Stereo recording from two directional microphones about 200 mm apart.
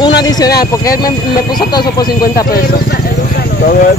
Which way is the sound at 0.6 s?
15° left (ahead or behind).